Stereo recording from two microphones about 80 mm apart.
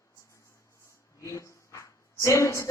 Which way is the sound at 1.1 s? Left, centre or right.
Left.